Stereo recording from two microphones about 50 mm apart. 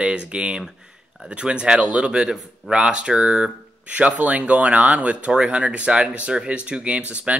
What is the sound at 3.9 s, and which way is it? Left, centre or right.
Speech, right.